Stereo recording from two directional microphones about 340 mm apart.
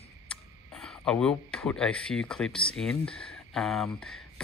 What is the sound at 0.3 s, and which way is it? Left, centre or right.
Speech, centre.